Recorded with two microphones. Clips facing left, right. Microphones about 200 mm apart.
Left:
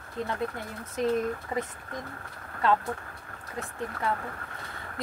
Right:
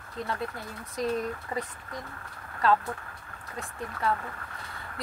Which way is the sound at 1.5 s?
20° left (ahead or behind).